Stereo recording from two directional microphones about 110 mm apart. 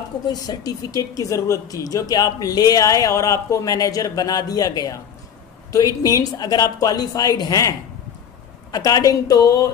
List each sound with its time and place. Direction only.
0.3 s speech: 35° left (ahead or behind)
6.0 s speech: 35° left (ahead or behind)
8.7 s speech: 35° left (ahead or behind)